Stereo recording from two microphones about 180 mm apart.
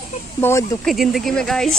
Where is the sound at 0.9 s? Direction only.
Centre (ahead or behind).